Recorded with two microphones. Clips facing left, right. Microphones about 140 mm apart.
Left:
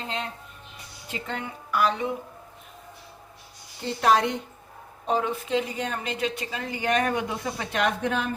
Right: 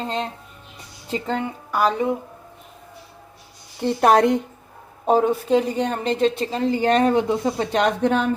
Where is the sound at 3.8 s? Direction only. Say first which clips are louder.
Right 6 dB; 55° right (ahead or behind).